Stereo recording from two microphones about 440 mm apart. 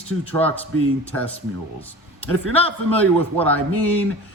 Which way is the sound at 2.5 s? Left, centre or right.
Centre.